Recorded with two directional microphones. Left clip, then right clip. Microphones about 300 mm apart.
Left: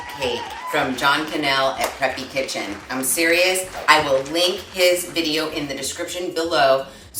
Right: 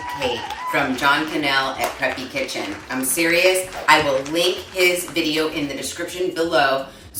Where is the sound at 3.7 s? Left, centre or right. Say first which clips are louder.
Even; centre.